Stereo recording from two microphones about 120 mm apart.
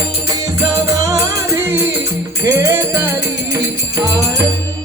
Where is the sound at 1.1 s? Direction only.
25° right (ahead or behind).